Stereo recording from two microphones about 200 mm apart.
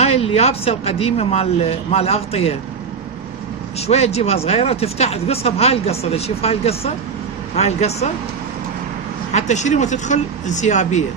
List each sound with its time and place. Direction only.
0.0 s speech: 30° left (ahead or behind)
3.8 s speech: 30° left (ahead or behind)
9.3 s speech: 35° left (ahead or behind)